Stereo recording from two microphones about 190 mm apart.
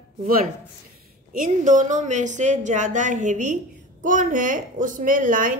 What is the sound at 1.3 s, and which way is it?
A woman's voice, 45° right (ahead or behind).